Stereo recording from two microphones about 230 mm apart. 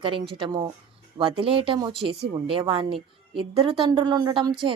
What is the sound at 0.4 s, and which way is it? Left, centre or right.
Speech, centre.